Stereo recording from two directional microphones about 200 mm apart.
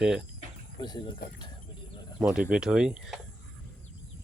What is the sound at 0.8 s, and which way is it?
Speech, 20° left (ahead or behind).